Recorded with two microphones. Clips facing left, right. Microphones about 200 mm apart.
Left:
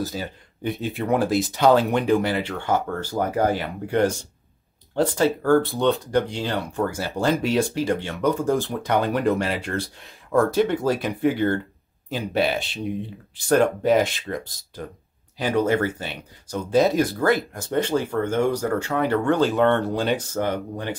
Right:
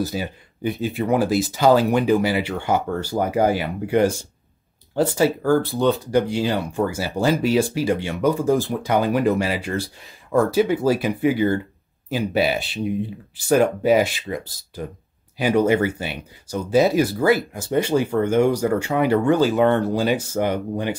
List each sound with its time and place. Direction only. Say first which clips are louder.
0.0 s speech: right 3 dB; 10° right (ahead or behind)